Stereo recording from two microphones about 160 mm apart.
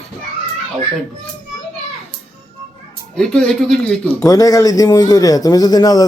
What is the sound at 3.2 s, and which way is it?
Speech, 5° left (ahead or behind).